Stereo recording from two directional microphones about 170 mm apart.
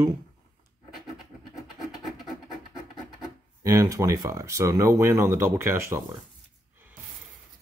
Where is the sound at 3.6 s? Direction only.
20° right (ahead or behind).